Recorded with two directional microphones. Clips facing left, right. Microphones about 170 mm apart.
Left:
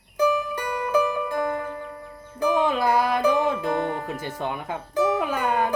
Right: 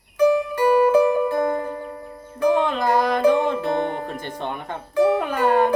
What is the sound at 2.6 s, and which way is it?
Music, 10° left (ahead or behind).